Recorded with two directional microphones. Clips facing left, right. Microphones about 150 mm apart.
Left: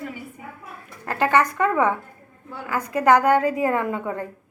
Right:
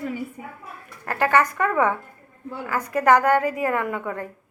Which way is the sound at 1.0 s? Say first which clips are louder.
Even; 20° left (ahead or behind).